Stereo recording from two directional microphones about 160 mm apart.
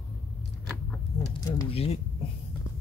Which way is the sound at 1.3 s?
30° left (ahead or behind).